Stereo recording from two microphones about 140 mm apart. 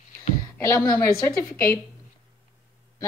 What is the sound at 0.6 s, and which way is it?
Speech, 20° left (ahead or behind).